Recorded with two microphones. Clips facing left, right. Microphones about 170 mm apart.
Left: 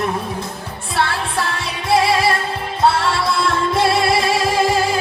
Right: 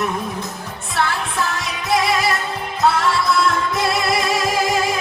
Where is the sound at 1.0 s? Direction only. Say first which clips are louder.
Left 1 dB; 30° left (ahead or behind).